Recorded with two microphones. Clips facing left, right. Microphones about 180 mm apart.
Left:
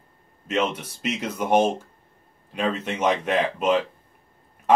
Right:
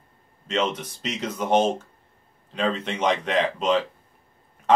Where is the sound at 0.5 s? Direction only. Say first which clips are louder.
Left 1 dB; 10° left (ahead or behind).